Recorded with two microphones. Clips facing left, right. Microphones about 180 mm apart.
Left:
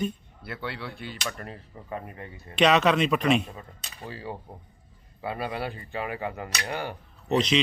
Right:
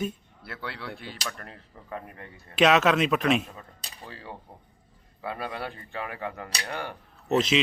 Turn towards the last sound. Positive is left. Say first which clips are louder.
# even
turn(degrees=-5)  # may be behind; listen again after turning